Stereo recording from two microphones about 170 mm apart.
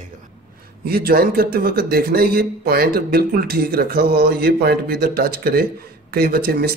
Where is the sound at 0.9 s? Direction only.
65° right (ahead or behind).